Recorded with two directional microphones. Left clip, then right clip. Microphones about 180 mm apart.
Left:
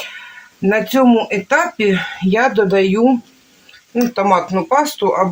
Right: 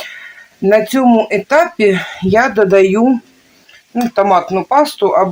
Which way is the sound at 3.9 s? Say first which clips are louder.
Right 3 dB; 55° right (ahead or behind).